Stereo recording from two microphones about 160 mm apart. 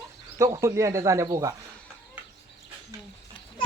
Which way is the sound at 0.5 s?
20° right (ahead or behind).